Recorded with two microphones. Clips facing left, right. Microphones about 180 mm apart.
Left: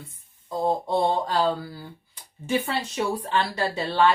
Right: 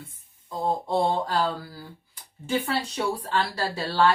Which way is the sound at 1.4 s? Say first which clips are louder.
Left 3 dB; 20° left (ahead or behind).